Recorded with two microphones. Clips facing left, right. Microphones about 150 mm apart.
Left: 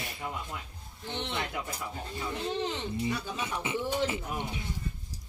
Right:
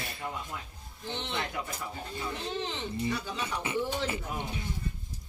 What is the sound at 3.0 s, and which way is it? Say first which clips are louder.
Speech: even; 15° left (ahead or behind).